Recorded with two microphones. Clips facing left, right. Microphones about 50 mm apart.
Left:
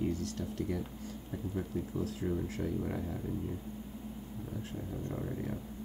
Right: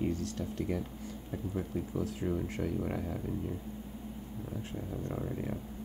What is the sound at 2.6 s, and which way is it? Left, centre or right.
Speech, right.